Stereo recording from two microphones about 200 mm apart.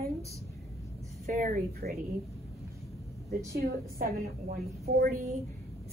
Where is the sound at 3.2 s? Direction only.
50° right (ahead or behind).